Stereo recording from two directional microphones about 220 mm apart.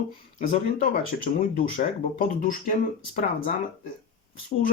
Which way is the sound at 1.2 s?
40° left (ahead or behind).